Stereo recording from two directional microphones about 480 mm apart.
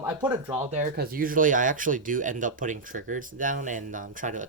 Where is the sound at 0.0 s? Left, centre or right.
Centre.